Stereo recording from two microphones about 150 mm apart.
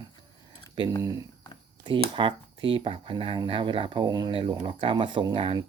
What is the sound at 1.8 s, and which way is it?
Speech, 30° right (ahead or behind).